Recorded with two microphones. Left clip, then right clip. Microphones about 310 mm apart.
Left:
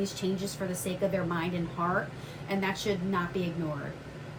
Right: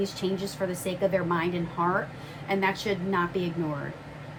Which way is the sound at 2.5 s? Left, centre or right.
Right.